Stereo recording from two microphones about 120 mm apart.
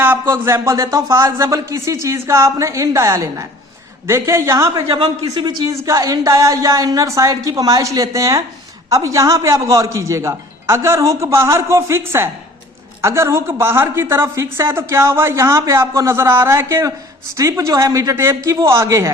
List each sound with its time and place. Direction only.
0.0 s a man's voice: 20° right (ahead or behind)